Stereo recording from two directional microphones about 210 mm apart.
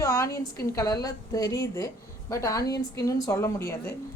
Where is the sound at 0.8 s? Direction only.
15° left (ahead or behind).